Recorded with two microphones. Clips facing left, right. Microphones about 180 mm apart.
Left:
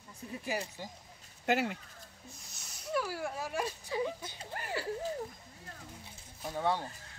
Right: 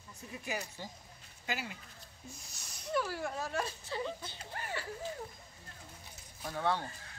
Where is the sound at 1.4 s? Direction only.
65° left (ahead or behind).